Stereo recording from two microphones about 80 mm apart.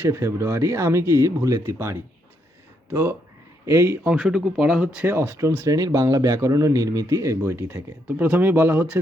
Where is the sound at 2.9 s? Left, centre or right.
Right.